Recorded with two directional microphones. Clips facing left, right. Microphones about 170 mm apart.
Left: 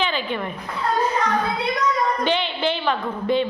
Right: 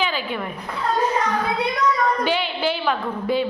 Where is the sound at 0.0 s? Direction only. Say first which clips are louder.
Left 1 dB; 5° right (ahead or behind).